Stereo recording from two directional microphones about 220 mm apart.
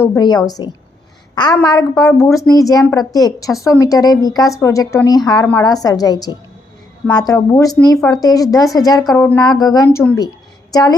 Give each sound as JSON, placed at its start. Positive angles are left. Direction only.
{"t": 0.0, "sound": "a woman's voice", "side_deg": 15}